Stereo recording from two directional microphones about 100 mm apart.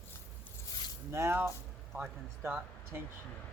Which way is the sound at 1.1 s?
25° right (ahead or behind).